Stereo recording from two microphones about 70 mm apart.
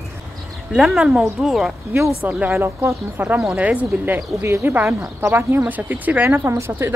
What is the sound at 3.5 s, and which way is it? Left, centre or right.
Speech, centre.